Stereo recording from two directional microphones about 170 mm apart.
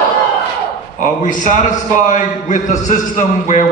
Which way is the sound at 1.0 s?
50° left (ahead or behind).